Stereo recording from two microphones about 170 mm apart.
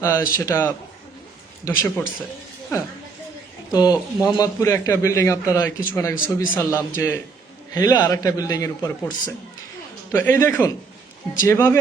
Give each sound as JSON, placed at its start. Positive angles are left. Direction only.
{"t": 0.0, "sound": "a man's voice", "side_deg": 15}
{"t": 3.7, "sound": "a man's voice", "side_deg": 25}